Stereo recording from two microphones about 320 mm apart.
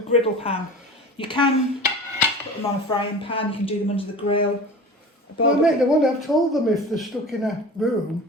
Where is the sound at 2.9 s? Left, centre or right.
Centre.